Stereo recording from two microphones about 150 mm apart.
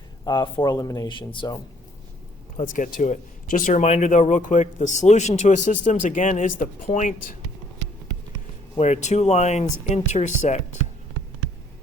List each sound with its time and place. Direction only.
0.3 s speech: 30° left (ahead or behind)
2.6 s speech: 60° left (ahead or behind)
8.8 s speech: 50° left (ahead or behind)